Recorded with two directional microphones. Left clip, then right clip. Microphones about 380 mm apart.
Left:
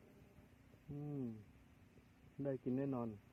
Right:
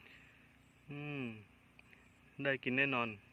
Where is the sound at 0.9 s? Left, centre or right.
Centre.